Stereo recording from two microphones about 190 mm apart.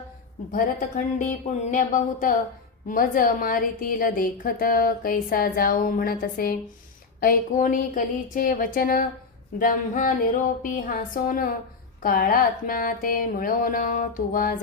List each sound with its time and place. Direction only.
0.5 s a woman's voice: 45° left (ahead or behind)